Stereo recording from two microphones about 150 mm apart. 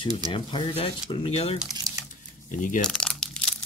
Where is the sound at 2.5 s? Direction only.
60° left (ahead or behind).